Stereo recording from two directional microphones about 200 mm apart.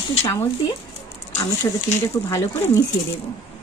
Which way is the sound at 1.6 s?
15° left (ahead or behind).